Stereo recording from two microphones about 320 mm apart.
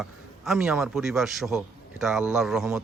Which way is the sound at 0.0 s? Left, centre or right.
Centre.